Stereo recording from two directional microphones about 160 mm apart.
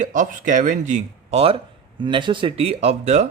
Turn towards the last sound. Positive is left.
turn(degrees=-45)  # may be behind; listen again after turning